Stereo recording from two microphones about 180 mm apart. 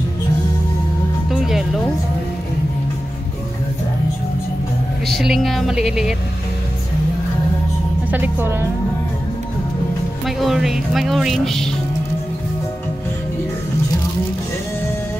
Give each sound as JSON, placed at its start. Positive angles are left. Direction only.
{"t": 1.3, "sound": "music", "side_deg": 0}
{"t": 5.0, "sound": "speech", "side_deg": 0}
{"t": 8.1, "sound": "a woman's voice", "side_deg": -10}
{"t": 10.2, "sound": "speech", "side_deg": 0}